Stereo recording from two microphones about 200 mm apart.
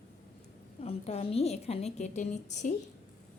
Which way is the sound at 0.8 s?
30° left (ahead or behind).